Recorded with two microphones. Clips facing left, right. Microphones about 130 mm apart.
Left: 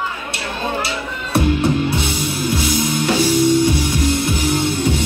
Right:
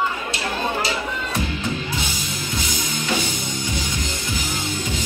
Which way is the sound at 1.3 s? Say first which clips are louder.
Left 13 dB; 70° left (ahead or behind).